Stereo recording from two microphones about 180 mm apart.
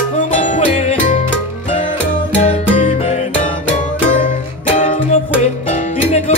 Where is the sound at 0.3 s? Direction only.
40° left (ahead or behind).